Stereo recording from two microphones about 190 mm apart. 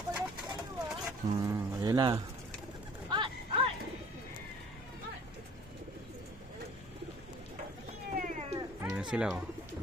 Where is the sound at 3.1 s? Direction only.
25° right (ahead or behind).